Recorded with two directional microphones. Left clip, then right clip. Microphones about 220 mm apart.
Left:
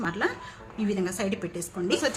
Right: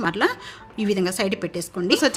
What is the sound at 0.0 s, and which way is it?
A woman's voice, 50° right (ahead or behind).